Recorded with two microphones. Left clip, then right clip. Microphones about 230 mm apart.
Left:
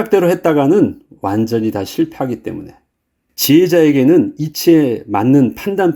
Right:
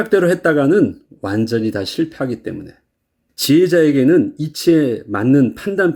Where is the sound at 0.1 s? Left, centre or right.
Left.